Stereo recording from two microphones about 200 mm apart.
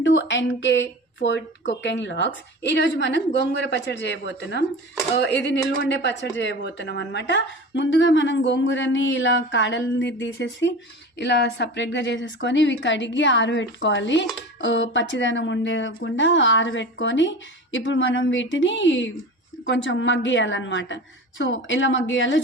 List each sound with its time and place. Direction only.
0.0 s a woman's voice: 65° left (ahead or behind)